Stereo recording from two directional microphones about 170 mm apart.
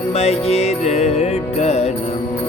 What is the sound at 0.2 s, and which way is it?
Music, 40° left (ahead or behind).